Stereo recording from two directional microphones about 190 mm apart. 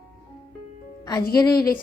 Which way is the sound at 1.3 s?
20° left (ahead or behind).